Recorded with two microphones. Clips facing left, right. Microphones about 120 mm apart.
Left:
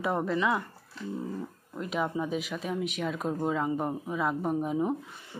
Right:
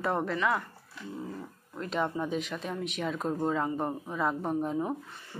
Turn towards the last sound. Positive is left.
turn(degrees=10)  # may be behind; listen again after turning